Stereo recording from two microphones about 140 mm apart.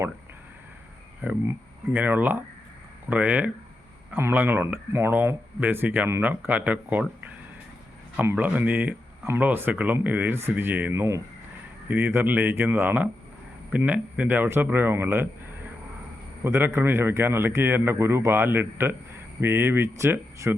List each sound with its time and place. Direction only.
1.2 s speech: 15° right (ahead or behind)
8.1 s speech: 15° right (ahead or behind)